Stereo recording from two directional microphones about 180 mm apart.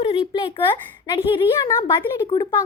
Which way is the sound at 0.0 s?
30° left (ahead or behind).